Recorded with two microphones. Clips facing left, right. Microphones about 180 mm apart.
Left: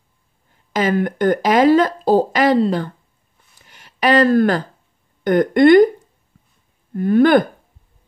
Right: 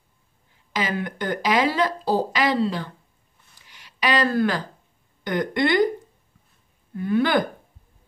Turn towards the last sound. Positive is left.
turn(degrees=50)  # may be behind; listen again after turning